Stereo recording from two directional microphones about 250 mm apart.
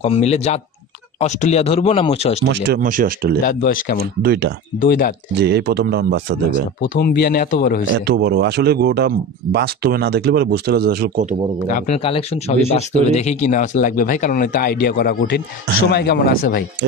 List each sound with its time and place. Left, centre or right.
0.0 s speech: left
2.5 s a man's voice: right
3.4 s speech: left
4.2 s a man's voice: right
4.8 s speech: left
5.3 s a man's voice: right
6.9 s speech: left
7.9 s a man's voice: right
11.6 s speech: left